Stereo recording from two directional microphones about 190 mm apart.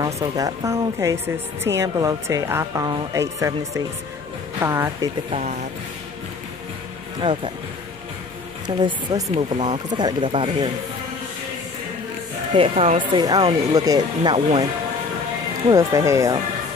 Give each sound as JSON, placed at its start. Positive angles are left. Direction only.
{"t": 0.0, "sound": "a woman's voice", "side_deg": -20}
{"t": 5.3, "sound": "speech", "side_deg": -40}
{"t": 7.2, "sound": "speech", "side_deg": -25}
{"t": 8.6, "sound": "speech", "side_deg": -25}
{"t": 12.5, "sound": "speech", "side_deg": -30}
{"t": 15.7, "sound": "a woman's voice", "side_deg": -15}